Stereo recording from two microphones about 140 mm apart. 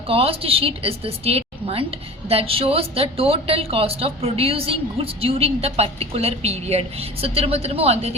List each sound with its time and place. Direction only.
0.1 s a woman's voice: 40° right (ahead or behind)